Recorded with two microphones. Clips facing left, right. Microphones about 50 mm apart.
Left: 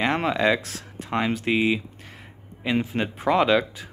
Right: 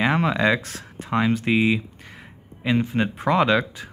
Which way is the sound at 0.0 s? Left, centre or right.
Centre.